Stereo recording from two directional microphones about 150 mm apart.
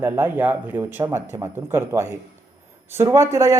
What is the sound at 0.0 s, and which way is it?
Speech, 15° right (ahead or behind).